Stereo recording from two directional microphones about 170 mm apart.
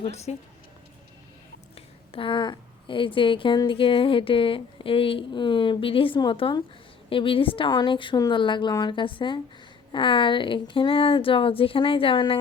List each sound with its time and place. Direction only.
0.0 s a woman's voice: 40° left (ahead or behind)
2.1 s a woman's voice: 30° left (ahead or behind)